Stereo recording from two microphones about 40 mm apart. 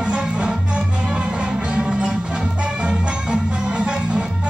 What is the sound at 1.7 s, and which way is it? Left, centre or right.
Music, right.